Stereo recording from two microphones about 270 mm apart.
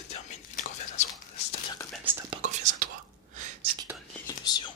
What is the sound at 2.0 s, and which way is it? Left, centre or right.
Whispering, centre.